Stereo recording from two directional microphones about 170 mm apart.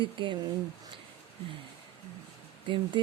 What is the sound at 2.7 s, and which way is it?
Speech, 30° right (ahead or behind).